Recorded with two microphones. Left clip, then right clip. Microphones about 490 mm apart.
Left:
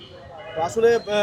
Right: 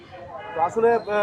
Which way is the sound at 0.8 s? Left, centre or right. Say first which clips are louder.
Left 3 dB; centre.